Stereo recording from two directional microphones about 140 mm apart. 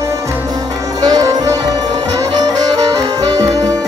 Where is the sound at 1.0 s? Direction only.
25° right (ahead or behind).